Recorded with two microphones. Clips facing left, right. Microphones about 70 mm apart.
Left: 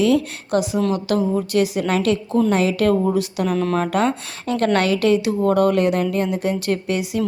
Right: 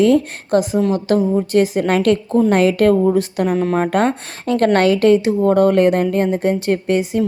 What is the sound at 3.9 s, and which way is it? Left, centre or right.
A woman's voice, right.